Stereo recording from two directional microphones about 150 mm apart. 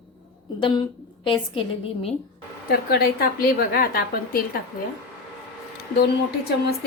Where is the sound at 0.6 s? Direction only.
30° left (ahead or behind).